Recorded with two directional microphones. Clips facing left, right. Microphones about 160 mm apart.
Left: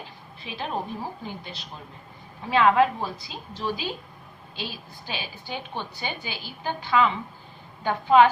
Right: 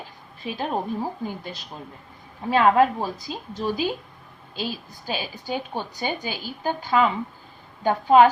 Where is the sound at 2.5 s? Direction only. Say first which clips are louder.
Right 2 dB; 40° right (ahead or behind).